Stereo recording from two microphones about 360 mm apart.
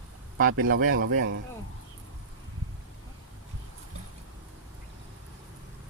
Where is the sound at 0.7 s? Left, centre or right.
Right.